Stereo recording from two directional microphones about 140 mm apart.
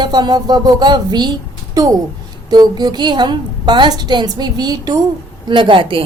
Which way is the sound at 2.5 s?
30° right (ahead or behind).